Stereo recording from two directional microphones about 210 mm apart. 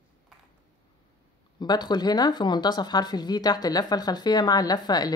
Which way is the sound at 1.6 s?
20° left (ahead or behind).